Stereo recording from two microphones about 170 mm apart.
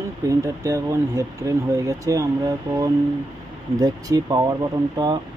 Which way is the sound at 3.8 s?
20° right (ahead or behind).